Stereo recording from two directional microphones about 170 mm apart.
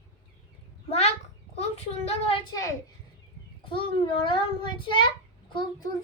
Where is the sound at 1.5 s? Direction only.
40° left (ahead or behind).